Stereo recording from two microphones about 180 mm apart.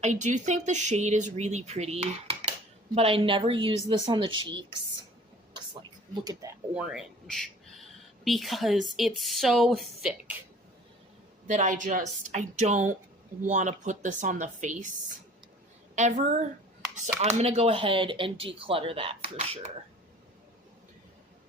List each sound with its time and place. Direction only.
0.0 s speech: 40° right (ahead or behind); by 4.6 s 25° right (ahead or behind)
6.2 s speech: 15° right (ahead or behind)
6.7 s speech: centre (ahead or behind)
11.4 s speech: 40° right (ahead or behind)
16.0 s speech: 40° right (ahead or behind)